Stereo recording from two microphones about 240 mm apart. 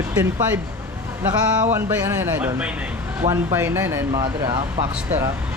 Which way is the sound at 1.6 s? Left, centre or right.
Centre.